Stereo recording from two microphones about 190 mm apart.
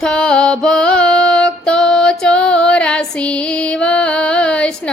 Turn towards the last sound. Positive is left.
turn(degrees=5)  # may be behind; listen again after turning